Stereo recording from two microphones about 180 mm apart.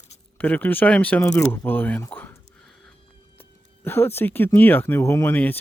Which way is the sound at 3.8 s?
10° left (ahead or behind).